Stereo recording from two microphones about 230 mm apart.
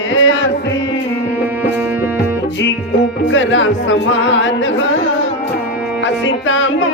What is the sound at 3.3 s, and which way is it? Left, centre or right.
Carnatic music, left.